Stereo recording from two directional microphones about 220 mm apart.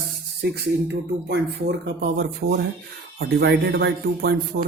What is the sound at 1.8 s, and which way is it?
Speech, 50° right (ahead or behind).